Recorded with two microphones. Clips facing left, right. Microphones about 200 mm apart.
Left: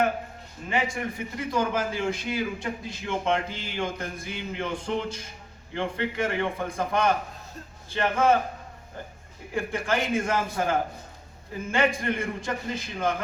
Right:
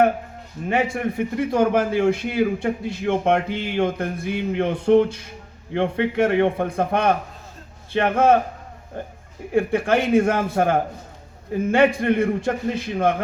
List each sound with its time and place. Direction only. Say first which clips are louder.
0.7 s a man's voice: right 6 dB; 60° right (ahead or behind)
9.6 s a man's voice: right 8 dB; 60° right (ahead or behind)